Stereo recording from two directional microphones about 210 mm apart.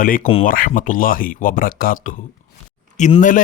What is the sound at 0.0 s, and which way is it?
Speech, 40° left (ahead or behind).